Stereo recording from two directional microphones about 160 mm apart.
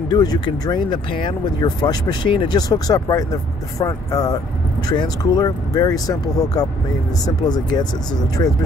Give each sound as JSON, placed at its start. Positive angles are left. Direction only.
{"t": 0.1, "sound": "speech", "side_deg": 25}